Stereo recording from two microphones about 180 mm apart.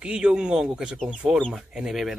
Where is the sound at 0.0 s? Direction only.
5° right (ahead or behind).